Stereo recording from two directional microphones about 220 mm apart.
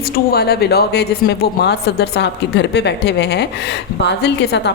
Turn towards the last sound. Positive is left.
turn(degrees=50)  # may be behind; listen again after turning